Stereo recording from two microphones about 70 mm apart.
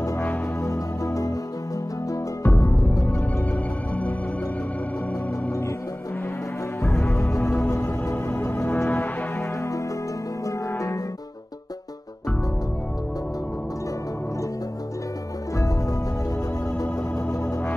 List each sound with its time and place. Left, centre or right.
0.6 s music: left
2.4 s music: left
6.9 s music: centre
7.3 s music: left
16.7 s organ: left